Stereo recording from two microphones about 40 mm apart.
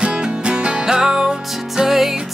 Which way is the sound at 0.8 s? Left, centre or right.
Centre.